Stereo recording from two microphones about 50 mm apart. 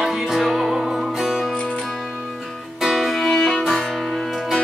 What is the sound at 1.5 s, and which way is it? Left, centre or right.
Music, left.